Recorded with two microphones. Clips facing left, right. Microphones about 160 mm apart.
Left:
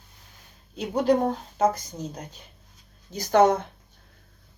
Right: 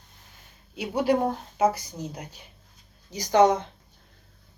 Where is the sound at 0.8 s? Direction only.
10° right (ahead or behind).